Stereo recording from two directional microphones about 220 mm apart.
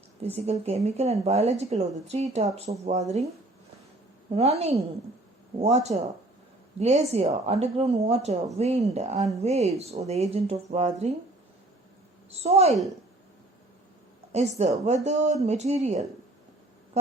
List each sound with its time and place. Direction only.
0.3 s a woman's voice: 30° right (ahead or behind)
4.3 s a woman's voice: 30° right (ahead or behind)
12.3 s a woman's voice: 30° right (ahead or behind)
14.6 s speech: 30° right (ahead or behind)